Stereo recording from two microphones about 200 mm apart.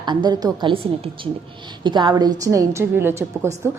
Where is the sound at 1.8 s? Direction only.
20° right (ahead or behind).